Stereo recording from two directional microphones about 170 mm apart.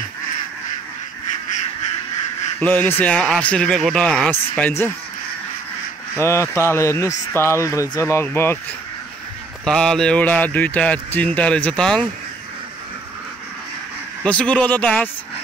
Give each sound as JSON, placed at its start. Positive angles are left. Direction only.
{"t": 2.6, "sound": "speech", "side_deg": 10}
{"t": 6.1, "sound": "speech", "side_deg": 15}
{"t": 9.7, "sound": "speech", "side_deg": 5}
{"t": 14.2, "sound": "speech", "side_deg": 5}